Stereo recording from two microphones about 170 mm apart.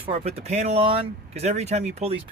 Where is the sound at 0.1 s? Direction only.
35° right (ahead or behind).